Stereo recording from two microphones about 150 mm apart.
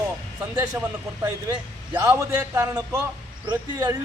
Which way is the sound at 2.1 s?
15° right (ahead or behind).